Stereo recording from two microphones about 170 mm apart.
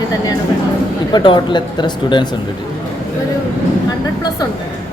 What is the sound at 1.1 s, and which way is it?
Speech, 25° left (ahead or behind).